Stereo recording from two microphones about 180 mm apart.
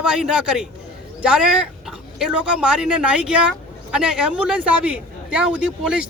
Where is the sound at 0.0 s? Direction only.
5° right (ahead or behind).